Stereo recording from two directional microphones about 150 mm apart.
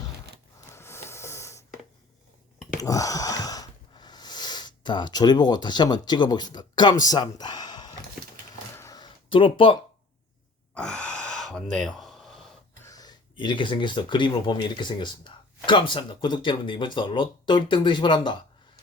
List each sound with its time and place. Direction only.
0.7 s a sound: 15° left (ahead or behind)
2.8 s snort: 20° left (ahead or behind)
7.0 s speech: 25° left (ahead or behind)
8.7 s a sound: 20° left (ahead or behind)
10.8 s gasp: 5° left (ahead or behind)
12.8 s speech: 25° left (ahead or behind)